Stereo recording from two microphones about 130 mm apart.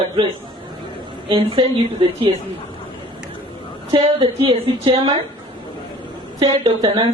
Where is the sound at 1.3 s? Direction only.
45° right (ahead or behind).